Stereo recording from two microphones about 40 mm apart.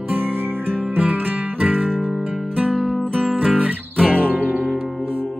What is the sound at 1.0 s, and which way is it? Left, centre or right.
Music, right.